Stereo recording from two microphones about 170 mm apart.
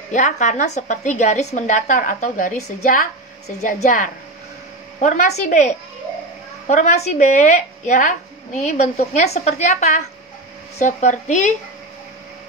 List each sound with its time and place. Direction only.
0.1 s a woman's voice: 45° left (ahead or behind)